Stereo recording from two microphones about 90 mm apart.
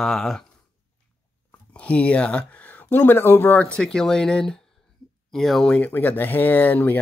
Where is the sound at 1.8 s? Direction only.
15° left (ahead or behind).